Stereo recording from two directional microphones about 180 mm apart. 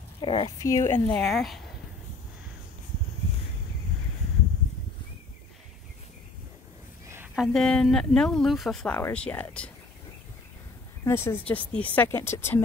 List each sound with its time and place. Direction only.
0.2 s speech: 30° left (ahead or behind)
1.1 s speech: centre (ahead or behind)
7.3 s speech: centre (ahead or behind)
11.1 s speech: 15° left (ahead or behind)